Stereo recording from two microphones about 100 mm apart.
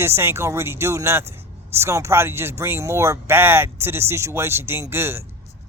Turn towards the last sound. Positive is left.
turn(degrees=-25)  # may be behind; listen again after turning